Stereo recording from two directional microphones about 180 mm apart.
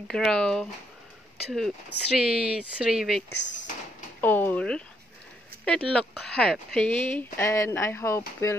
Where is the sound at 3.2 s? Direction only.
80° left.